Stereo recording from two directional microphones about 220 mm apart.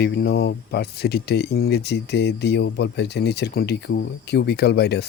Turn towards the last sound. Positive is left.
turn(degrees=50)  # may be behind; listen again after turning